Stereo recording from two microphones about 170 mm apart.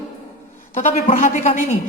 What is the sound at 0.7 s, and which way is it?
Speech, 50° left (ahead or behind).